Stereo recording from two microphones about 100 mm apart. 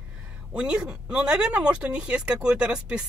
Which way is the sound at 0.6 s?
10° right (ahead or behind).